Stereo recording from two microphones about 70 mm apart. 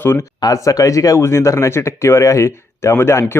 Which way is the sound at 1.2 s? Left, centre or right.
Left.